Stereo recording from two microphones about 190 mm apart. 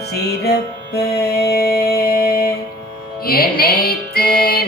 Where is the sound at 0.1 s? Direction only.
55° left (ahead or behind).